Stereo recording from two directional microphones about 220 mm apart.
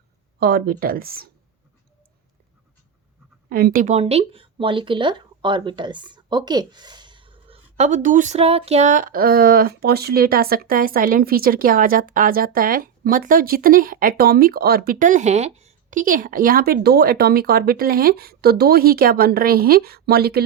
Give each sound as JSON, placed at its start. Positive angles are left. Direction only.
{"t": 0.3, "sound": "speech", "side_deg": -45}
{"t": 3.5, "sound": "speech", "side_deg": -40}